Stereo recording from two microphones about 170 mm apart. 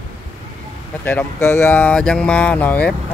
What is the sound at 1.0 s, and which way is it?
Speech, 10° left (ahead or behind).